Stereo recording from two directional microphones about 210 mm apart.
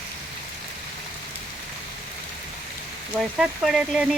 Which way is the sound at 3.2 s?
Centre (ahead or behind).